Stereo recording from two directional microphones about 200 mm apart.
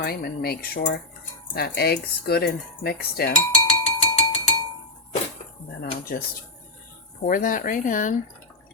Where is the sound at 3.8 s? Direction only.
35° left (ahead or behind).